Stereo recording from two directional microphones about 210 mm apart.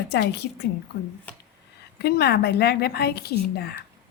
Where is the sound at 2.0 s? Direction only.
50° left (ahead or behind).